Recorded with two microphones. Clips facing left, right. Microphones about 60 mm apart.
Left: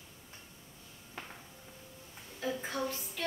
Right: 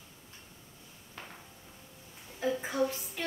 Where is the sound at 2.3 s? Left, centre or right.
Centre.